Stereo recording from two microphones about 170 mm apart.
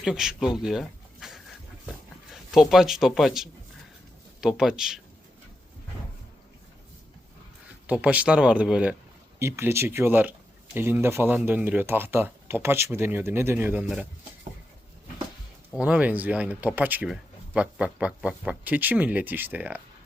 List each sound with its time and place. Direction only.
0.0 s speech: 5° right (ahead or behind)
7.9 s speech: 10° right (ahead or behind)
15.7 s speech: 10° right (ahead or behind)